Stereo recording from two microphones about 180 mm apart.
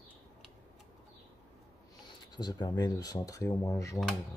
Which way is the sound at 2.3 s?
25° left (ahead or behind).